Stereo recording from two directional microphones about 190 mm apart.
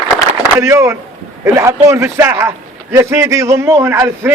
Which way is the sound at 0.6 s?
15° right (ahead or behind).